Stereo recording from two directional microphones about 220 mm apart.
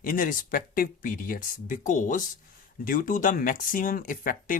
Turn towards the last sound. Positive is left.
turn(degrees=40)  # may be behind; listen again after turning